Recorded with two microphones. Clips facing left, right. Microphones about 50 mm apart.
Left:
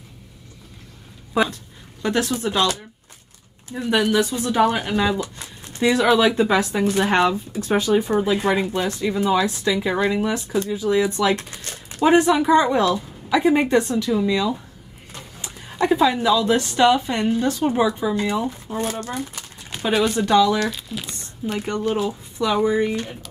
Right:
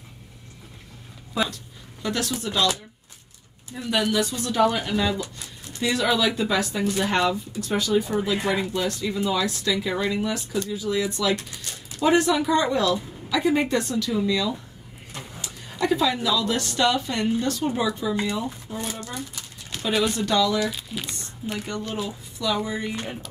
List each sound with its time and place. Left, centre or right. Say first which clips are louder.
1.3 s speech: left 6 dB; left
3.7 s speech: left 4 dB; left
5.2 s a sound: left 3 dB; left
6.1 s speech: left 6 dB; left
10.5 s speech: left 8 dB; left
12.1 s speech: left 5 dB; left
18.9 s speech: left 6 dB; left
19.9 s speech: left 4 dB; centre
20.2 s speech: left 8 dB; left
20.6 s speech: left 2 dB; centre
21.5 s speech: left 8 dB; left